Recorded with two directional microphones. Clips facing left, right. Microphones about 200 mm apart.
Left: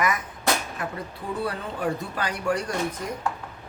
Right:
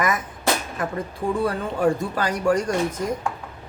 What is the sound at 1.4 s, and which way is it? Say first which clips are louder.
Speech: right 6 dB; 45° right (ahead or behind).